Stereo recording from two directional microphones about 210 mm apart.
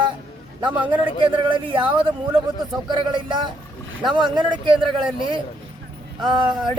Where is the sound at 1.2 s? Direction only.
20° right (ahead or behind).